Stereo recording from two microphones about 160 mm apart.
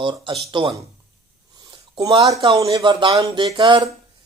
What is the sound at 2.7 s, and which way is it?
Speech, 30° right (ahead or behind).